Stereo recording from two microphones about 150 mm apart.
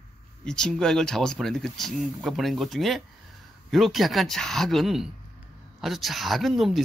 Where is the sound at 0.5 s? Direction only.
5° left (ahead or behind).